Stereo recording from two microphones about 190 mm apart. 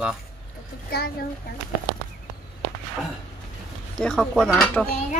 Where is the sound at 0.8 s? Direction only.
55° left (ahead or behind).